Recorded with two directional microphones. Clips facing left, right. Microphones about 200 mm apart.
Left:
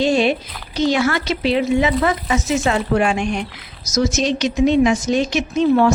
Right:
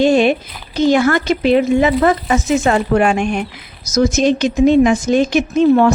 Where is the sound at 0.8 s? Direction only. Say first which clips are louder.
Right 5 dB; 50° right (ahead or behind).